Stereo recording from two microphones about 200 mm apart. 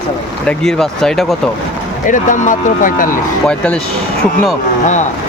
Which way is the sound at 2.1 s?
40° left (ahead or behind).